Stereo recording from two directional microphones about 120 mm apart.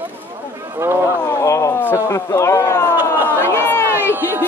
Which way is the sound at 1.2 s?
25° left (ahead or behind).